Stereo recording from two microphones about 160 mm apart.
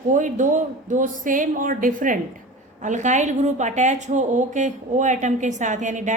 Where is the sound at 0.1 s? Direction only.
50° right (ahead or behind).